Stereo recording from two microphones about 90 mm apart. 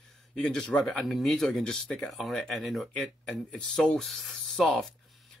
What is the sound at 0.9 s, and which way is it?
Speech, centre (ahead or behind).